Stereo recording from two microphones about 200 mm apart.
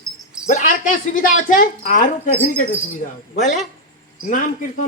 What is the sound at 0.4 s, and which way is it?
A man's voice, 40° left (ahead or behind).